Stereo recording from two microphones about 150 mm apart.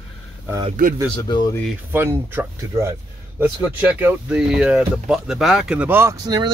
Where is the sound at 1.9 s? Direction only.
15° right (ahead or behind).